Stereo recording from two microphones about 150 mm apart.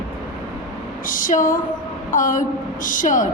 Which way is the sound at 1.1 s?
65° left (ahead or behind).